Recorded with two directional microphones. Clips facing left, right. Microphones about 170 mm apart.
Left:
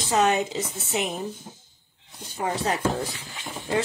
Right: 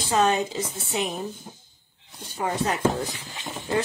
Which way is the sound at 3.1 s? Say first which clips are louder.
Right 1 dB; 20° right (ahead or behind).